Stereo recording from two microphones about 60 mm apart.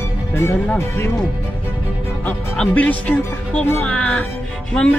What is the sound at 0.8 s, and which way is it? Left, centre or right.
Speech, left.